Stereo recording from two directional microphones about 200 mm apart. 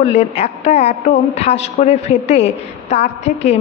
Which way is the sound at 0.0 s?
30° left (ahead or behind).